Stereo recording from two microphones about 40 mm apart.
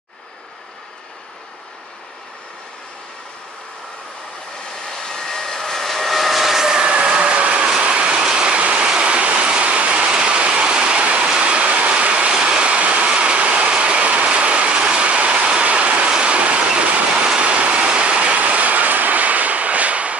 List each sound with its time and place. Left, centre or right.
4.8 s vehicle: centre; by 7.6 s right
7.8 s train: right